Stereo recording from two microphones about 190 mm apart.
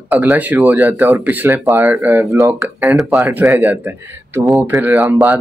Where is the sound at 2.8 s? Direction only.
5° right (ahead or behind).